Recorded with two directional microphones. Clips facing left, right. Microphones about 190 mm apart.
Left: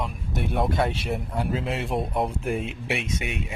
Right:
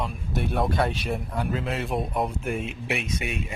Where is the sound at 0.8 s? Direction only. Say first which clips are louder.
Even; 25° left (ahead or behind).